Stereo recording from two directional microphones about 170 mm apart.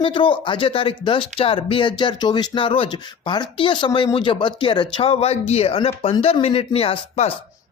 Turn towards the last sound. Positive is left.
turn(degrees=35)  # may be behind; listen again after turning